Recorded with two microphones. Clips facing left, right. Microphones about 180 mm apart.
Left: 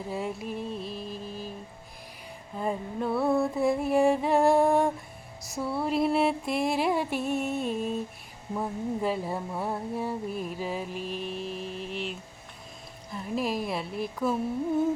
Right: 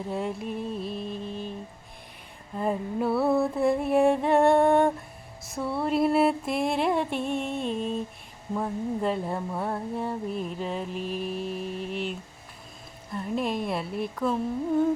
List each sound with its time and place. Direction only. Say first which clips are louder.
0.1 s music: right 2 dB; centre (ahead or behind)
2.6 s speech: right 3 dB; 5° right (ahead or behind)